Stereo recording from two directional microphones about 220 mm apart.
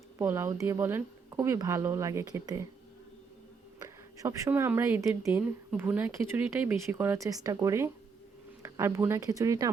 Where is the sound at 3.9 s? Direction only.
15° right (ahead or behind).